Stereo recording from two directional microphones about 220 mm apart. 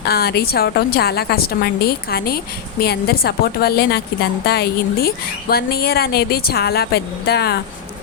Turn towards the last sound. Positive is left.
turn(degrees=45)  # may be behind; listen again after turning